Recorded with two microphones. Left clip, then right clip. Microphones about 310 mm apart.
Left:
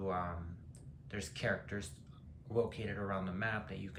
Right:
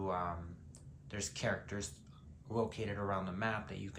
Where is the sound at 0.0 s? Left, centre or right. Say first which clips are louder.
Even; centre.